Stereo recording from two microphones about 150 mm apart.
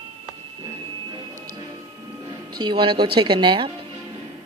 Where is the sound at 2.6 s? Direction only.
30° right (ahead or behind).